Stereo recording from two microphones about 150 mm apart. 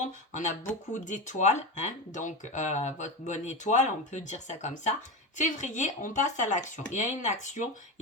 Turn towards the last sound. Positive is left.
turn(degrees=55)  # may be behind; listen again after turning